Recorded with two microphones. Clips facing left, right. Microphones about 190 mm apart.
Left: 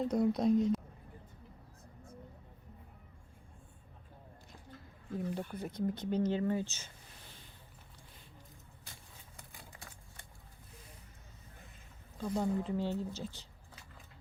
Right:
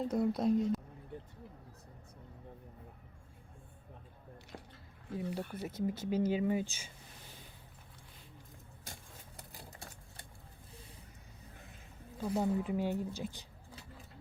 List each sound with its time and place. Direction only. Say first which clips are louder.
0.0 s speech: left 2 dB; 5° right (ahead or behind)
1.1 s vehicle: right 13 dB; 75° right (ahead or behind)
5.1 s speech: left 1 dB; 5° right (ahead or behind)
9.5 s typewriter: right 3 dB; 35° right (ahead or behind)
12.2 s speech: right 1 dB; 10° right (ahead or behind)